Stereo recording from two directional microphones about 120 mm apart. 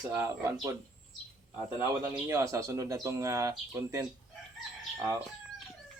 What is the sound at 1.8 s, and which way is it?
Speech, 20° right (ahead or behind).